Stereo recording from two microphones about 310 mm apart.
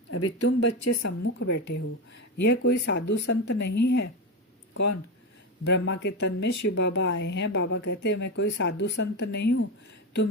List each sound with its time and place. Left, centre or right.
0.1 s speech: left
1.3 s speech: left
5.6 s speech: left